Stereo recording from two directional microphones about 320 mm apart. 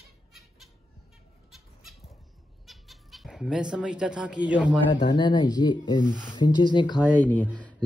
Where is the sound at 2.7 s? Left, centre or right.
Centre.